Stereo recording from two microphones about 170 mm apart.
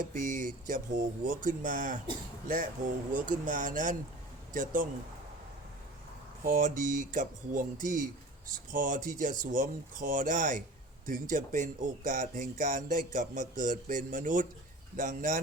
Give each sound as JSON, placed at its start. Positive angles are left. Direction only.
{"t": 0.0, "sound": "speech", "side_deg": -50}
{"t": 3.1, "sound": "speech", "side_deg": -50}
{"t": 6.4, "sound": "speech", "side_deg": -50}